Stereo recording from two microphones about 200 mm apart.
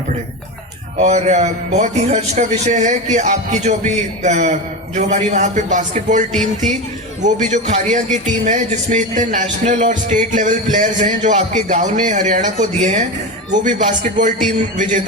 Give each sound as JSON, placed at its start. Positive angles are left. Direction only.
{"t": 0.9, "sound": "speech", "side_deg": -35}